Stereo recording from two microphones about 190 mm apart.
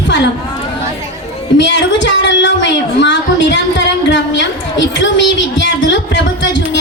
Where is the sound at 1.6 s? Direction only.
70° left (ahead or behind).